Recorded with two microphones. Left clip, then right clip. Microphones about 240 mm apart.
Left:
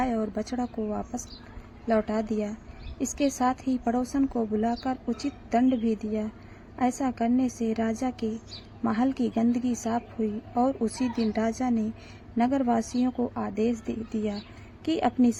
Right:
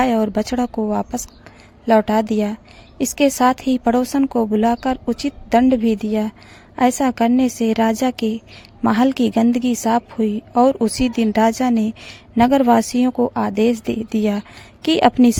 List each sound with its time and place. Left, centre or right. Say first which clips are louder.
0.0 s a woman's voice: right 11 dB; right